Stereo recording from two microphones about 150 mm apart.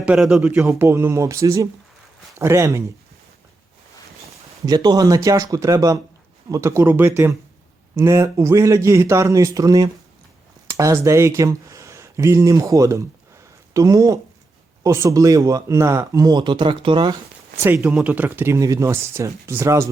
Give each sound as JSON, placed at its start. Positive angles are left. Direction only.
{"t": 0.0, "sound": "a man's voice", "side_deg": -5}
{"t": 0.6, "sound": "speech", "side_deg": -15}
{"t": 4.6, "sound": "speech", "side_deg": -25}
{"t": 17.7, "sound": "speech", "side_deg": -5}